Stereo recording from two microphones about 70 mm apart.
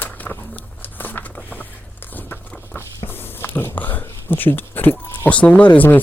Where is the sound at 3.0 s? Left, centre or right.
Left.